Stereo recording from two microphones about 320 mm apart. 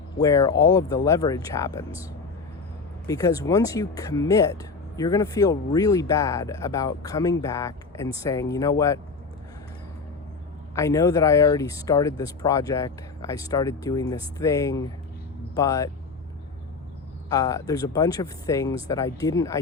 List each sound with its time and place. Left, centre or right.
0.2 s speech: centre
3.1 s speech: centre
10.8 s speech: centre
17.2 s speech: centre